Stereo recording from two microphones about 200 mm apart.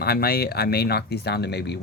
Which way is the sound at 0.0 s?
50° left (ahead or behind).